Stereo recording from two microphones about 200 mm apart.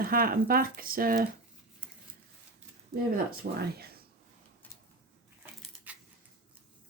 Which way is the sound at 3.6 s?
50° right (ahead or behind).